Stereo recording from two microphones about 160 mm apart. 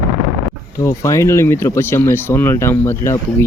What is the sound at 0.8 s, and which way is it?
Speech, 20° left (ahead or behind).